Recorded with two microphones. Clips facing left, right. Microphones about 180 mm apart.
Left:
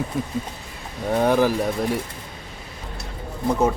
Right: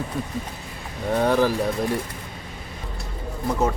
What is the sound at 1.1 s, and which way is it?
Speech, 10° left (ahead or behind).